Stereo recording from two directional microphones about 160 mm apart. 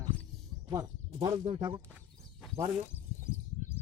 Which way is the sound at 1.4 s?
30° right (ahead or behind).